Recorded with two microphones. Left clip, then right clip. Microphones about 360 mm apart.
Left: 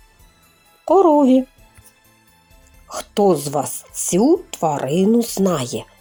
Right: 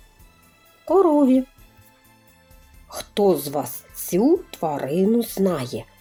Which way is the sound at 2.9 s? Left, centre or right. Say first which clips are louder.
Left 3 dB; centre.